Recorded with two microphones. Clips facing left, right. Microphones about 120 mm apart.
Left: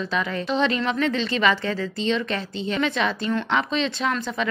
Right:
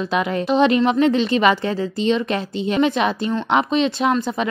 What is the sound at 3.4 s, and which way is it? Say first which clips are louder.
Speech: right 9 dB; 50° right (ahead or behind).